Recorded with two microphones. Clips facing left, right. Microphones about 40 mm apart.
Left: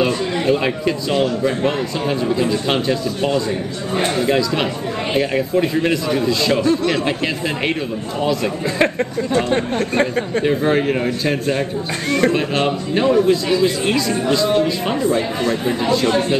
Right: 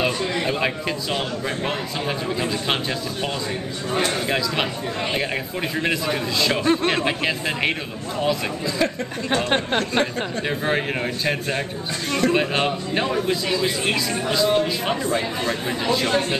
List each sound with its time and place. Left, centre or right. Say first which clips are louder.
0.0 s speech: left 4 dB; centre
6.6 s speech: left 3 dB; right
9.3 s speech: left 1 dB; right
10.4 s speech: left 6 dB; centre
12.6 s speech: left 6 dB; centre